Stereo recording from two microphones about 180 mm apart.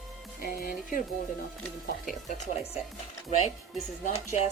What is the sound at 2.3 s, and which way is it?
Speech, 35° left (ahead or behind).